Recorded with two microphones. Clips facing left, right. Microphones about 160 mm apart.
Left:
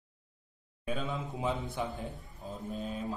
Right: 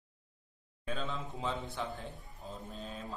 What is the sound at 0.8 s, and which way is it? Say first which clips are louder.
A man's voice: left 3 dB; 10° left (ahead or behind).